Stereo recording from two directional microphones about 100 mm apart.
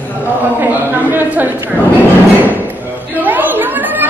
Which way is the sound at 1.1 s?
15° right (ahead or behind).